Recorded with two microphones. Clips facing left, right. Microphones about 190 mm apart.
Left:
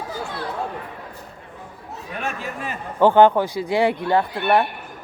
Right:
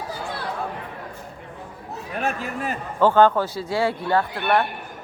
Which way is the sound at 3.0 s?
15° left (ahead or behind).